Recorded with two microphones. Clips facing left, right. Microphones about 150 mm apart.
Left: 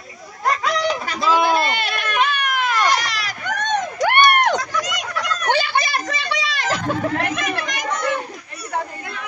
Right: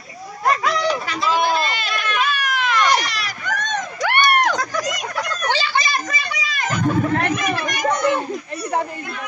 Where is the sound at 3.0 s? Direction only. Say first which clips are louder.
Even; 90° left.